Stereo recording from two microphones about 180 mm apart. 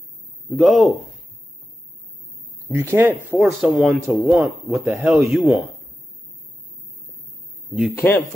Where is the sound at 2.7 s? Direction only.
15° right (ahead or behind).